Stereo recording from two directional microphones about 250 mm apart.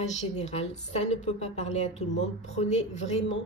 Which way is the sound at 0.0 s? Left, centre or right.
Left.